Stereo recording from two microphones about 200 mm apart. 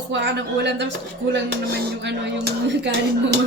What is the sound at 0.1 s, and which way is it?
Speech, 65° right (ahead or behind).